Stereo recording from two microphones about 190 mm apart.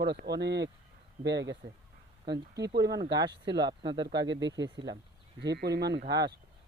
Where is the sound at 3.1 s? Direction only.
20° right (ahead or behind).